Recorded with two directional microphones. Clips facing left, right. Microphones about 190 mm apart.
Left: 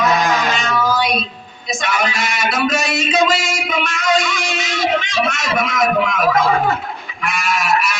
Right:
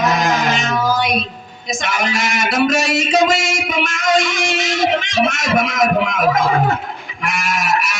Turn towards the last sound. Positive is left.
turn(degrees=-45)  # may be behind; listen again after turning